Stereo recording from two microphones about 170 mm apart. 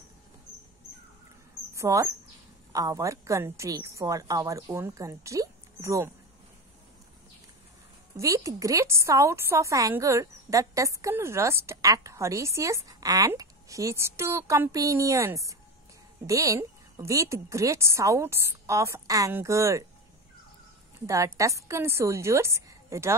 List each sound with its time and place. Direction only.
1.8 s a woman's voice: 20° right (ahead or behind)
8.2 s a woman's voice: 20° right (ahead or behind)
21.4 s a woman's voice: 20° right (ahead or behind)